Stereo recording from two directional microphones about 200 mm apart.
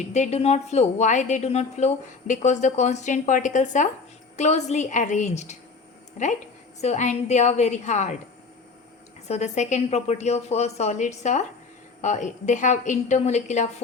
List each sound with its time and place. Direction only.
0.1 s a woman's voice: 35° left (ahead or behind)
9.2 s a woman's voice: 35° left (ahead or behind)